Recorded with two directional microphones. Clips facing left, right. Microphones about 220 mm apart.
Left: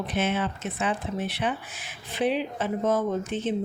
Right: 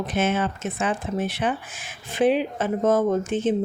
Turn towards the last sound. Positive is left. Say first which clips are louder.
# right 5 dB
turn(degrees=-50)  # may be behind; listen again after turning